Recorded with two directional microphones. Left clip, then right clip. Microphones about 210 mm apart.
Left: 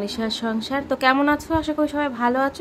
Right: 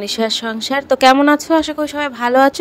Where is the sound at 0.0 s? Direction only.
35° right (ahead or behind).